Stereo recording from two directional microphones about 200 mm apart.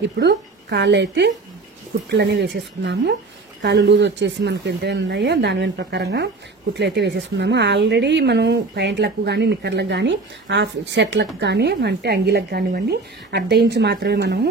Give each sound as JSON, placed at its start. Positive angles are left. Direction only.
{"t": 0.2, "sound": "speech", "side_deg": -60}